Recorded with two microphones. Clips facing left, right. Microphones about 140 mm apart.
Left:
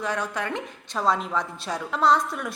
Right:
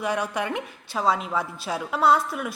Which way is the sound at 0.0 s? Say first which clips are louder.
Right 2 dB; 10° right (ahead or behind).